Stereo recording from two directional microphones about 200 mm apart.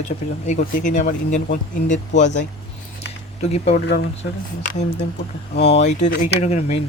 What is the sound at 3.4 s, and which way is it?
Speech, 30° left (ahead or behind).